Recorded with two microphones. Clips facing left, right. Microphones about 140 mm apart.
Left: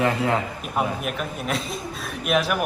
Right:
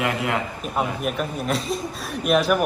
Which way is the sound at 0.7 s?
Centre (ahead or behind).